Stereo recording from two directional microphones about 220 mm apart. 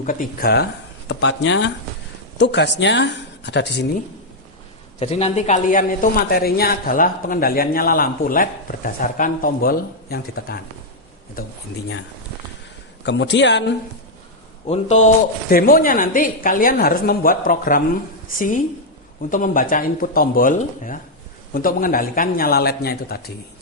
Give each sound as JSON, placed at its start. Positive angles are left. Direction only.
{"t": 0.0, "sound": "a woman's voice", "side_deg": 40}
{"t": 4.9, "sound": "a woman's voice", "side_deg": 30}
{"t": 13.1, "sound": "a woman's voice", "side_deg": 55}
{"t": 14.7, "sound": "a woman's voice", "side_deg": 30}